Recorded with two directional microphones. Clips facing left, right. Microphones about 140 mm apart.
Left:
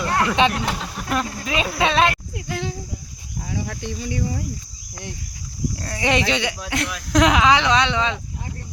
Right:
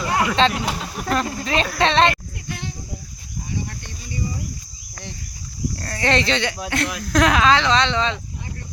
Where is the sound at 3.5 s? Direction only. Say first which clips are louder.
Left 3 dB; 90° left.